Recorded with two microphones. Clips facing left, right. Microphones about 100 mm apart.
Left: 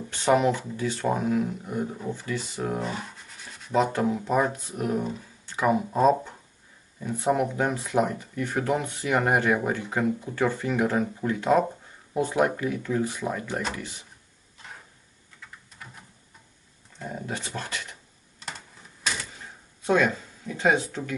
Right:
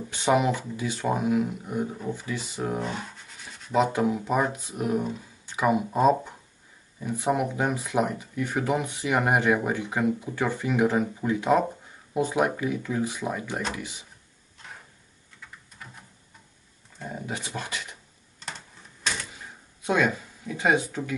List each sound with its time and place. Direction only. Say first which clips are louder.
0.1 s speech: left 1 dB; 10° right (ahead or behind)
2.1 s rub: left 1 dB; 10° right (ahead or behind)
3.8 s speech: right 1 dB; 10° right (ahead or behind)
5.5 s speech: even; 10° right (ahead or behind)
15.4 s typing: even; centre (ahead or behind)
17.3 s speech: right 1 dB; 10° right (ahead or behind)
18.4 s typewriter: even; centre (ahead or behind)
19.9 s speech: left 1 dB; 5° right (ahead or behind)